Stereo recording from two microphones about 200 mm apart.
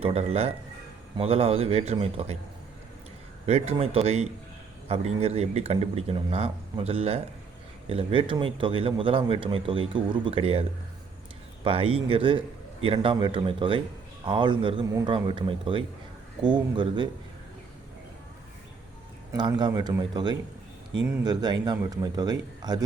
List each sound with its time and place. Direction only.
0.0 s speech: 30° right (ahead or behind)
3.4 s speech: 30° right (ahead or behind)
19.3 s speech: 20° right (ahead or behind)